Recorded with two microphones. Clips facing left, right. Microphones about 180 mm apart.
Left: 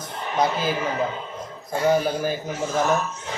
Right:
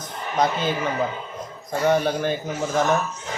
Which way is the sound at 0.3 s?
5° left (ahead or behind).